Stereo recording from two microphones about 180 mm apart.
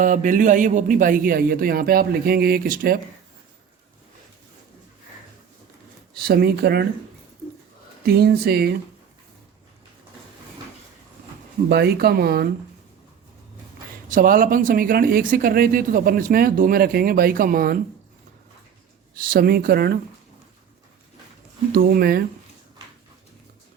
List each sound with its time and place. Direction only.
0.0 s speech: 45° right (ahead or behind)
6.1 s speech: 60° right (ahead or behind)
8.0 s speech: 60° right (ahead or behind)
11.7 s speech: 60° right (ahead or behind)
14.1 s speech: 50° right (ahead or behind)
19.1 s speech: 55° right (ahead or behind)
21.7 s speech: 55° right (ahead or behind)